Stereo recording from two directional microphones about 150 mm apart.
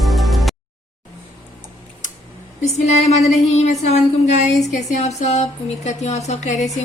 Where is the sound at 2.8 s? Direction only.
50° left (ahead or behind).